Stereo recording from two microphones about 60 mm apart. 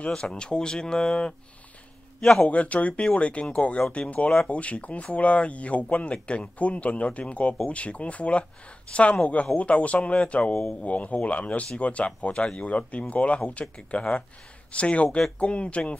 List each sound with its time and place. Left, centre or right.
0.0 s a man's voice: centre
2.4 s speech: left